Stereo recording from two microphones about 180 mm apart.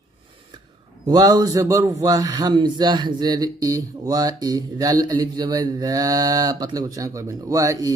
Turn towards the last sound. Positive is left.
turn(degrees=-20)  # may be behind; listen again after turning